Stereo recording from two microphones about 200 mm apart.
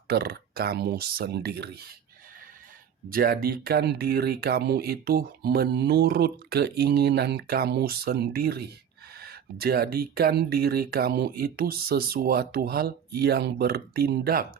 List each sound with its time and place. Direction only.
0.1 s speech: 50° right (ahead or behind)
3.1 s speech: 50° right (ahead or behind)